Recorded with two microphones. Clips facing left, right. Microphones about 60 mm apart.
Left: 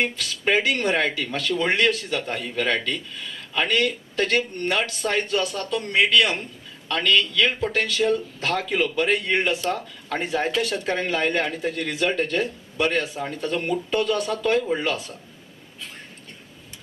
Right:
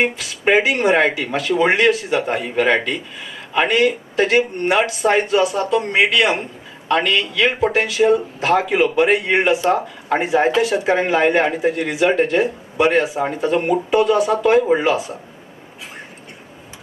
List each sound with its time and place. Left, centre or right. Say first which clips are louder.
0.0 s a man's voice: right 6 dB; centre